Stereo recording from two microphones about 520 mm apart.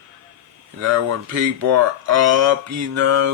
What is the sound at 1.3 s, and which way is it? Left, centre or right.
Speech, right.